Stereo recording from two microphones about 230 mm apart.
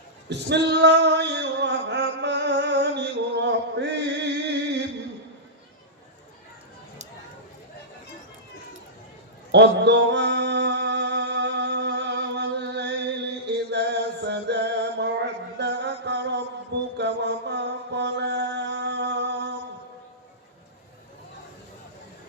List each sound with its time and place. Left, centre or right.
0.3 s male singing: right
9.5 s music: right
17.0 s mantra: right